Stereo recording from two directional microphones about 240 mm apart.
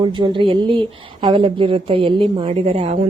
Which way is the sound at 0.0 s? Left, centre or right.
Centre.